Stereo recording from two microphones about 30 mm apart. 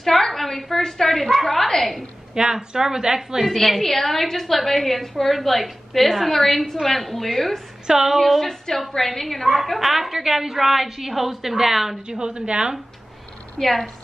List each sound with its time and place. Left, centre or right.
0.0 s a sound: centre
2.3 s a woman's voice: right
3.4 s a woman's voice: centre
7.8 s a woman's voice: centre
8.2 s a woman's voice: centre
9.6 s a woman's voice: centre
12.1 s a woman's voice: right
13.6 s a woman's voice: centre